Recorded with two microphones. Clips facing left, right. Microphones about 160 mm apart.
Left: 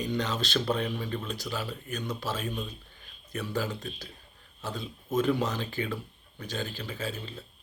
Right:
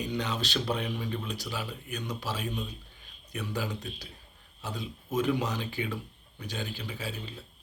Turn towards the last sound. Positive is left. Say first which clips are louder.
# left 2 dB
turn(degrees=-10)  # may be behind; listen again after turning